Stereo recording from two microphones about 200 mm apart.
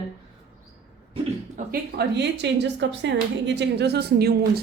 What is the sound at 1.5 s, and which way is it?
Speech, 50° right (ahead or behind).